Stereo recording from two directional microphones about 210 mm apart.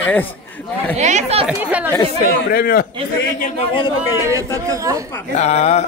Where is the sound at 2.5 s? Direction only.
45° left (ahead or behind).